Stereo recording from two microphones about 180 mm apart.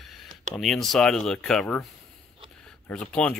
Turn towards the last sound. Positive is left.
turn(degrees=5)  # may be behind; listen again after turning